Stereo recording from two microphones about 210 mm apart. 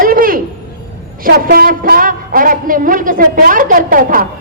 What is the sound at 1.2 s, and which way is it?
A man's voice, 45° right (ahead or behind).